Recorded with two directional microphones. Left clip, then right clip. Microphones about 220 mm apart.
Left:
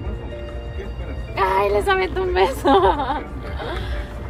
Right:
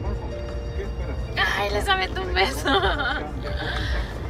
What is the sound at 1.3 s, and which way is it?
Music, 20° left (ahead or behind).